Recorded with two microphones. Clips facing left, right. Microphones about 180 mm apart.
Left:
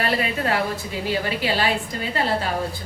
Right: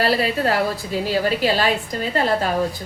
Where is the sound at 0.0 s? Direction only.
35° right (ahead or behind).